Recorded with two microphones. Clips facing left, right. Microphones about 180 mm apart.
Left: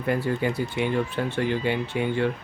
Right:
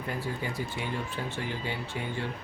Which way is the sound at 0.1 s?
70° left (ahead or behind).